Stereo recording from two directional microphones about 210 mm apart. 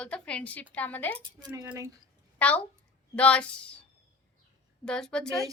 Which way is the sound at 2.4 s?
5° left (ahead or behind).